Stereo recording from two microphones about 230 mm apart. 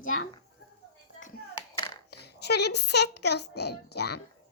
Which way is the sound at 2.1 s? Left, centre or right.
Left.